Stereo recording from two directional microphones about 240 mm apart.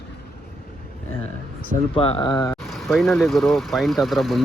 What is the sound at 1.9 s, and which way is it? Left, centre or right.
Speech, left.